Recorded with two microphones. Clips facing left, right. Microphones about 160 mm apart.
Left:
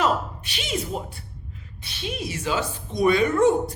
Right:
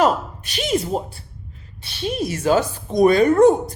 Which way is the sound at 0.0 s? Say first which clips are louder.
Right 5 dB; 45° right (ahead or behind).